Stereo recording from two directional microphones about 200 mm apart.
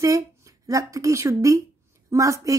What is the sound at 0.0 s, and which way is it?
A woman's voice, 15° right (ahead or behind).